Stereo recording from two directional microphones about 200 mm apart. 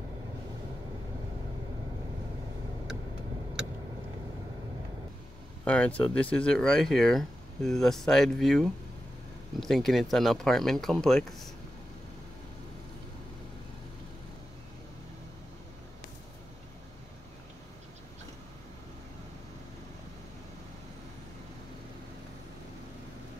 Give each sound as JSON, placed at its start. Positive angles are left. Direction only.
{"t": 5.7, "sound": "speech", "side_deg": 5}